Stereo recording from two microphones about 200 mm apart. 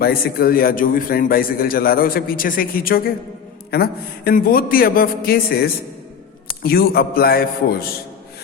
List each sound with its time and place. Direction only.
0.0 s a man's voice: 50° left (ahead or behind)